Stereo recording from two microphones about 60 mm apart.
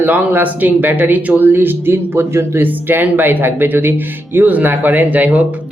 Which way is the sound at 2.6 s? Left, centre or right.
Right.